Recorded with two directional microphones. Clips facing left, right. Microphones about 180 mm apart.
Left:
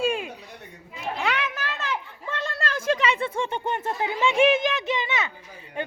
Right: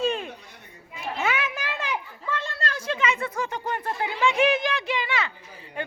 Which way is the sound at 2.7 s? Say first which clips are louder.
Left 9 dB; 50° left (ahead or behind).